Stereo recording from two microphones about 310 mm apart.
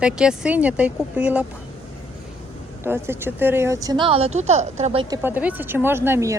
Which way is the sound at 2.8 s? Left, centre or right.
Centre.